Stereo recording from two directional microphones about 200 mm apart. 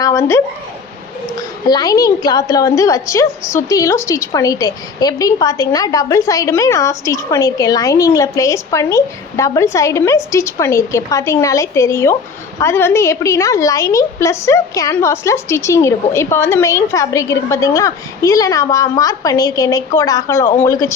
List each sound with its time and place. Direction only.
0.0 s a woman's voice: 15° left (ahead or behind)
1.6 s a woman's voice: 20° left (ahead or behind)